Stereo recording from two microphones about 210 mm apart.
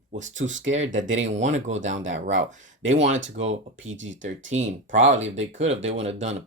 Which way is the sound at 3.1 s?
65° right (ahead or behind).